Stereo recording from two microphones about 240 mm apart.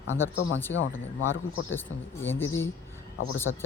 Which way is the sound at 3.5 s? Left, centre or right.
Left.